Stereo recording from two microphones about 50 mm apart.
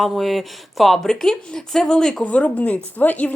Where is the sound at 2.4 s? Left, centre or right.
Left.